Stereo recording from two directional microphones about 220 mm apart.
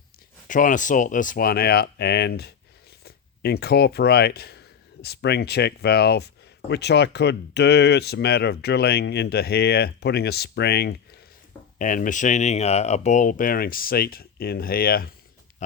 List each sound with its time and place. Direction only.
0.4 s speech: 35° left (ahead or behind)
11.8 s speech: 35° left (ahead or behind)